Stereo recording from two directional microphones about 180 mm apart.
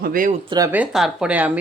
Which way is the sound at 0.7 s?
5° right (ahead or behind).